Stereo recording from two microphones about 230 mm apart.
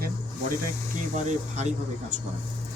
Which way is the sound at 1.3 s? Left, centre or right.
Right.